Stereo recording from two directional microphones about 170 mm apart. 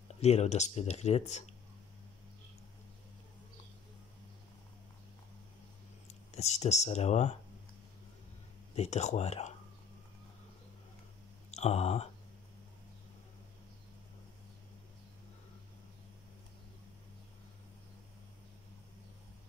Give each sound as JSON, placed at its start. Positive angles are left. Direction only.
{"t": 0.2, "sound": "speech", "side_deg": 40}
{"t": 6.3, "sound": "speech", "side_deg": 40}
{"t": 8.7, "sound": "speech", "side_deg": 40}
{"t": 11.5, "sound": "speech", "side_deg": 40}